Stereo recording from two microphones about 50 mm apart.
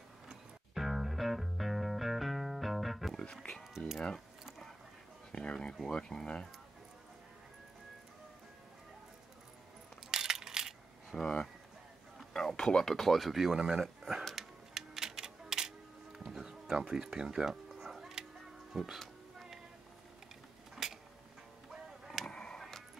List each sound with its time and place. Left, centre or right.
0.3 s music: centre
5.3 s speech: left
10.1 s coin: centre
11.1 s speech: left
12.4 s speech: centre
14.3 s music: centre
18.7 s speech: centre
20.7 s a sound: centre
22.0 s a sound: centre
22.3 s a sound: centre
22.6 s music: centre